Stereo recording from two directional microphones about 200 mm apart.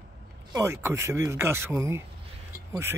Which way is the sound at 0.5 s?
15° right (ahead or behind).